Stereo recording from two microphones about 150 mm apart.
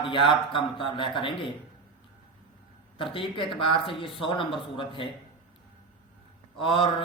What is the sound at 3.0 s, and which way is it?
A man's voice, 35° left (ahead or behind).